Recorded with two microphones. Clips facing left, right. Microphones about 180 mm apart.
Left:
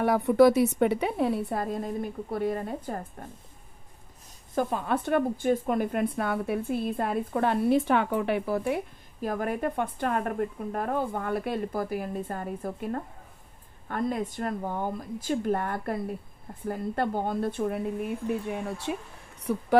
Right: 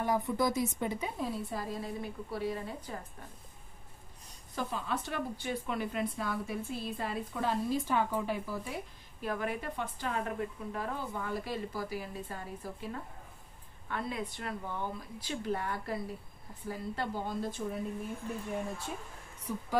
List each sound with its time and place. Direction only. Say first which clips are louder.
0.0 s a woman's voice: left 11 dB; 70° left (ahead or behind); by 3.3 s 50° left (ahead or behind)
4.6 s a woman's voice: left 8 dB; 55° left (ahead or behind)
9.2 s a woman's voice: left 7 dB; 45° left (ahead or behind); by 19.6 s 70° left (ahead or behind)